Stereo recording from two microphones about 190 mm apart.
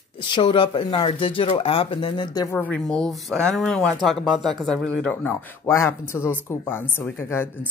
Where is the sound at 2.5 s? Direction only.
5° left (ahead or behind).